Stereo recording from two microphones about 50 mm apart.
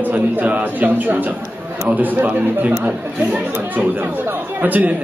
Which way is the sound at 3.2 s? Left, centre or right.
Right.